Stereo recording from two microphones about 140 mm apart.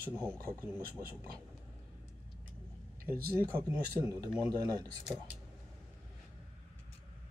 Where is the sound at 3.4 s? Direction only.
25° right (ahead or behind).